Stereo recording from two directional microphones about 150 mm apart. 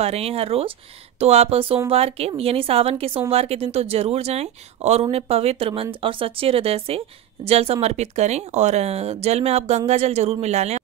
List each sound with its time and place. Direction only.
0.0 s a woman's voice: 40° right (ahead or behind)